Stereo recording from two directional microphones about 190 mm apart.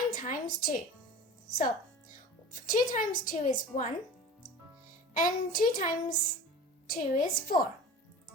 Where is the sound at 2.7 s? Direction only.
45° left (ahead or behind).